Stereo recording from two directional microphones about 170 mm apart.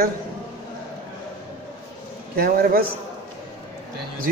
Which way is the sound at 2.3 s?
60° right (ahead or behind).